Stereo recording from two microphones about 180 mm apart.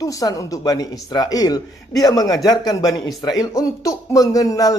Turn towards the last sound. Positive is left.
turn(degrees=20)  # may be behind; listen again after turning